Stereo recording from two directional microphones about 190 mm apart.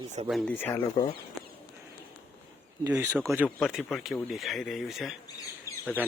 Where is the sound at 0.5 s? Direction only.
15° left (ahead or behind).